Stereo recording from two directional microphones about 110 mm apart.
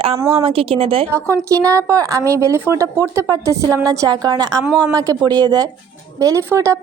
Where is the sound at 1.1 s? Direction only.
25° right (ahead or behind).